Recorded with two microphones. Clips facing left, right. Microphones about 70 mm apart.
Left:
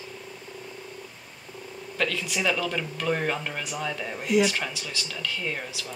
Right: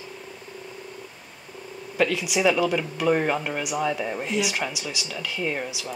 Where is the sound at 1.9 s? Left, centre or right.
Centre.